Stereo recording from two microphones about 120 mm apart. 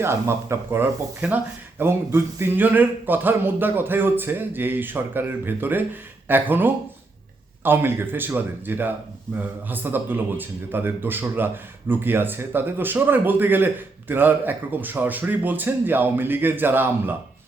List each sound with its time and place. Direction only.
0.0 s speech: 20° right (ahead or behind)